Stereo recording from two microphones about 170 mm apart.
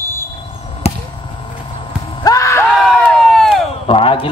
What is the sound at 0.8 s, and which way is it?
Basketball bounce, 40° left (ahead or behind).